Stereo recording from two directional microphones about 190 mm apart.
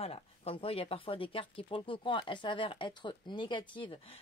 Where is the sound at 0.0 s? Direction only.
30° left (ahead or behind).